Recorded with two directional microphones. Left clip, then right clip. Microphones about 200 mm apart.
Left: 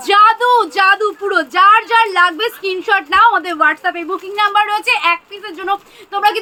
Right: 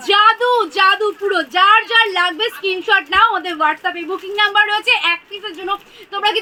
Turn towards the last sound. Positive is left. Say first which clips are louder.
# left 3 dB
turn(degrees=15)  # may be behind; listen again after turning